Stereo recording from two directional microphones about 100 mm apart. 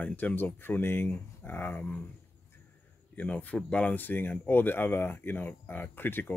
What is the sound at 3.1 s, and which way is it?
Speech, 15° left (ahead or behind).